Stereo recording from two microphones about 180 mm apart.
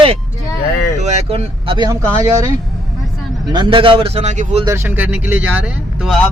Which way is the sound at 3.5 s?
25° right (ahead or behind).